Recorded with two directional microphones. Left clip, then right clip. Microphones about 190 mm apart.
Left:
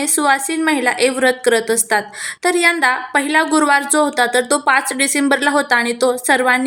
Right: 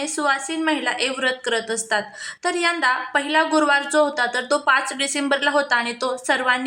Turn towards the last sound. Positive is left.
turn(degrees=20)  # may be behind; listen again after turning